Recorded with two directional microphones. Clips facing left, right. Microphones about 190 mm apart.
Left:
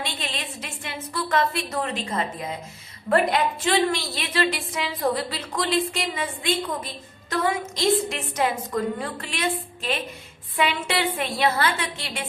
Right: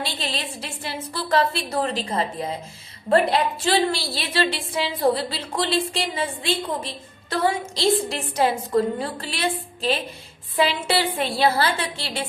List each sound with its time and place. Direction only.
0.0 s a woman's voice: 35° right (ahead or behind)